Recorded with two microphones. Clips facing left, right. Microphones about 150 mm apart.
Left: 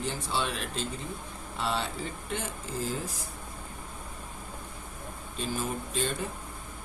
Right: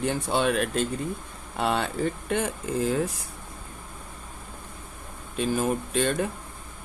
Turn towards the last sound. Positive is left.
turn(degrees=-60)  # may be behind; listen again after turning